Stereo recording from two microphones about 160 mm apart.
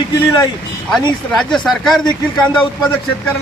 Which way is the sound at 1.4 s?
Centre (ahead or behind).